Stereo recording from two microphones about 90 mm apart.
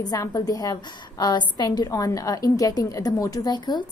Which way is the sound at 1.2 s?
55° left (ahead or behind).